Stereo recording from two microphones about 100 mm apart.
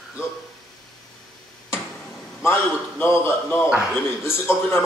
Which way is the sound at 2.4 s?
25° left (ahead or behind).